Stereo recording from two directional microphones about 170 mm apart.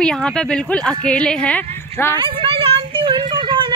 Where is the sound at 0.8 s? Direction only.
5° left (ahead or behind).